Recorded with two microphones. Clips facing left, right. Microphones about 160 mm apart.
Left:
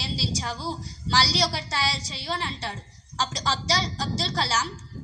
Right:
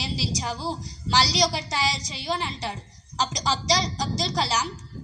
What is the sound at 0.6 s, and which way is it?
A woman's voice, 20° right (ahead or behind).